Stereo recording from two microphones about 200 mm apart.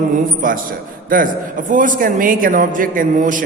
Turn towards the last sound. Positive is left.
turn(degrees=-40)  # may be behind; listen again after turning